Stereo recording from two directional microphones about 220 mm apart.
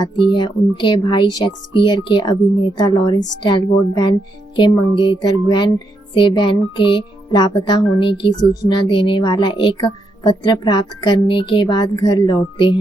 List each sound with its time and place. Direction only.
0.0 s speech: 20° left (ahead or behind)